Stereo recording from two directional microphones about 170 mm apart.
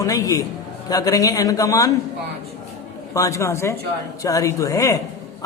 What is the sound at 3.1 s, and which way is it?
A woman's voice, 20° left (ahead or behind).